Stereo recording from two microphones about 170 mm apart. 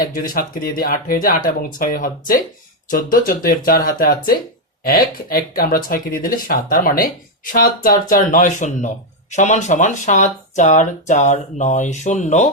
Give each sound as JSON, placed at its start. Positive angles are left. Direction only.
{"t": 0.0, "sound": "speech", "side_deg": 55}